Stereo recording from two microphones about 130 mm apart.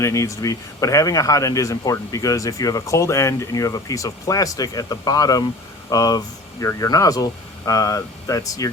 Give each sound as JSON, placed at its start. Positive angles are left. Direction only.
{"t": 0.0, "sound": "speech", "side_deg": 20}